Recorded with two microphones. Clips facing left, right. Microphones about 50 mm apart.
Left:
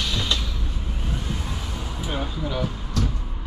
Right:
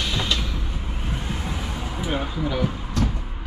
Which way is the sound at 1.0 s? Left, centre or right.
Right.